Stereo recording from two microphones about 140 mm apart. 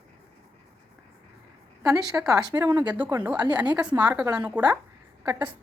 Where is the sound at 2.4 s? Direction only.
25° right (ahead or behind); by 4.6 s 10° right (ahead or behind).